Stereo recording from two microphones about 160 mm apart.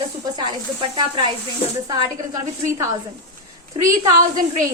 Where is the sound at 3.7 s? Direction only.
35° right (ahead or behind).